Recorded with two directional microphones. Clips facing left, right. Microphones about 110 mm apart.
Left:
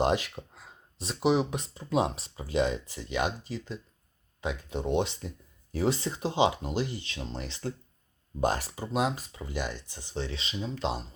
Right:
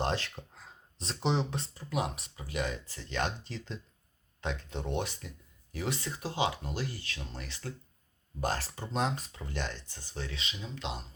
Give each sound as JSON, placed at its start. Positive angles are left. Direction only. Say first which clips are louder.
{"t": 0.0, "sound": "speech", "louder": "left 6 dB", "side_deg": 15}